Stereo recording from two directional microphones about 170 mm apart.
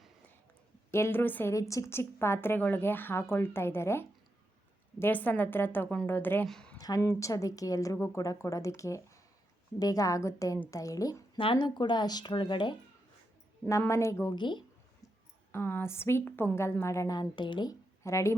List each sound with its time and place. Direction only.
0.9 s a woman's voice: 15° left (ahead or behind)
6.7 s a woman's voice: 20° left (ahead or behind)
13.7 s a woman's voice: 15° left (ahead or behind)
15.5 s a woman's voice: 15° left (ahead or behind)